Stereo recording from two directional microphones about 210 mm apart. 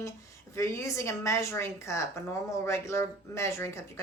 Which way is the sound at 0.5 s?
15° left (ahead or behind).